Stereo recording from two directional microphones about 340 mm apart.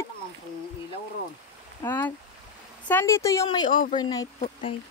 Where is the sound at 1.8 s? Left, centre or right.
Centre.